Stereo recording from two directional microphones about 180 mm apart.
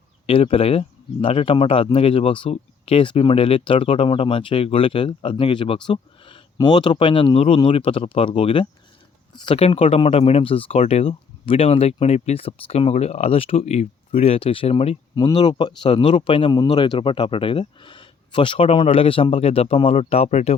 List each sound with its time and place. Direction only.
0.3 s speech: 30° left (ahead or behind)